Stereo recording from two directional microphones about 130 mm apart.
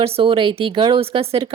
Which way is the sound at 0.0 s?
45° right (ahead or behind).